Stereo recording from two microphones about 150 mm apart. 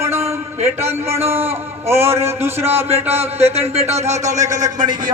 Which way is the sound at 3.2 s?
45° right (ahead or behind).